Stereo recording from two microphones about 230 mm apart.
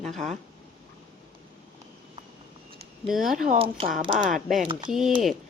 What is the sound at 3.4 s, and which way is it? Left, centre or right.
Speech, right.